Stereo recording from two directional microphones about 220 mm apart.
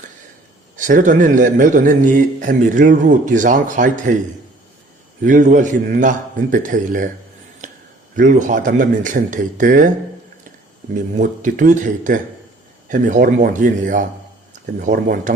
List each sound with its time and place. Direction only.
0.8 s a man's voice: 35° right (ahead or behind)
5.2 s a man's voice: 35° right (ahead or behind)
8.1 s a man's voice: 35° right (ahead or behind)
10.9 s a man's voice: 35° right (ahead or behind)